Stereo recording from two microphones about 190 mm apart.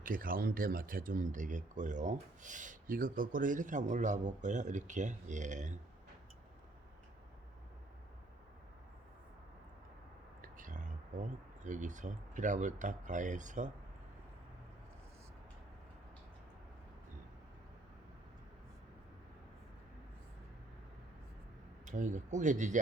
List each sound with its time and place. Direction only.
0.0 s speech: 45° right (ahead or behind)
10.4 s a sound: 45° right (ahead or behind)
11.6 s speech: 40° right (ahead or behind)
21.8 s speech: 40° right (ahead or behind)